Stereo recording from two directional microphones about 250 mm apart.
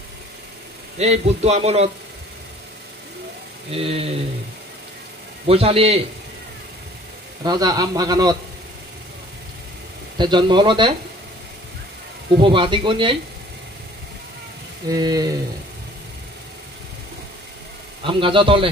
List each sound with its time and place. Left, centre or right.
0.9 s speech: right
3.7 s speech: right
5.5 s speech: right
7.4 s a man's voice: centre
10.1 s a man's voice: centre
12.4 s speech: centre
14.9 s a man's voice: centre
18.0 s speech: centre